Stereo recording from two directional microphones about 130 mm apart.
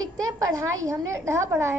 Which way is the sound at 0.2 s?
25° right (ahead or behind).